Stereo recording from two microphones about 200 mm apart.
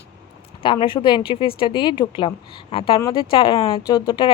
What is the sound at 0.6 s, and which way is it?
Speech, 25° left (ahead or behind).